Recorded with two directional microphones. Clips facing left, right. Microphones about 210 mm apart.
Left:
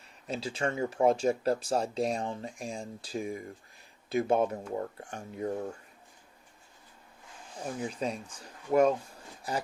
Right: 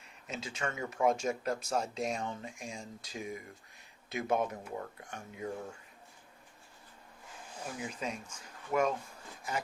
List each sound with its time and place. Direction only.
0.3 s speech: 35° left (ahead or behind)
7.8 s speech: 35° left (ahead or behind)